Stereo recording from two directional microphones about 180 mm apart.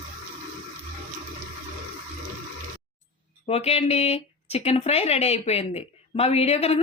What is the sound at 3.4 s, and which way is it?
Speech, 35° left (ahead or behind).